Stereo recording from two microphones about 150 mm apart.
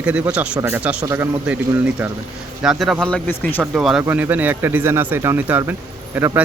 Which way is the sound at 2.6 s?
Centre (ahead or behind).